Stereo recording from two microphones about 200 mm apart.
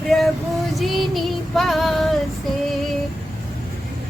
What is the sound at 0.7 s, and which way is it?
Female singing, centre (ahead or behind).